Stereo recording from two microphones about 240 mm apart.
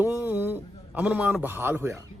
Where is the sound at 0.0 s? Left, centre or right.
Centre.